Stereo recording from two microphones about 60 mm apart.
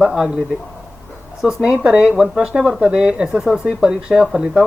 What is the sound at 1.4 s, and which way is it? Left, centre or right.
Speech, centre.